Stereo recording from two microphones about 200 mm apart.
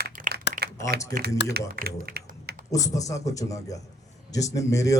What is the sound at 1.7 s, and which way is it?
Speech, 45° right (ahead or behind).